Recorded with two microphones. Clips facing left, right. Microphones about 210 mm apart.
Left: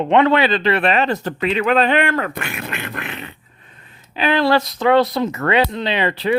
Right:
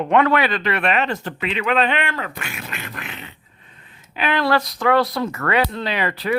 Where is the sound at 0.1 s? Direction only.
25° left (ahead or behind); by 3.2 s 60° left (ahead or behind).